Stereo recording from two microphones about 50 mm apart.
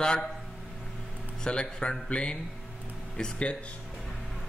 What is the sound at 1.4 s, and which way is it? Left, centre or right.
A man's voice, centre.